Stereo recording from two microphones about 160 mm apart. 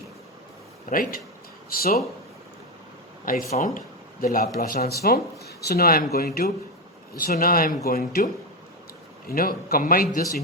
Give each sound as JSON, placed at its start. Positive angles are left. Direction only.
{"t": 0.9, "sound": "a man's voice", "side_deg": 60}
{"t": 3.3, "sound": "a man's voice", "side_deg": 60}